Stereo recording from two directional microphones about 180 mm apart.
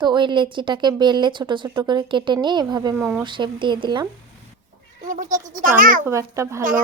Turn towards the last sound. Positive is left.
turn(degrees=-15)  # may be behind; listen again after turning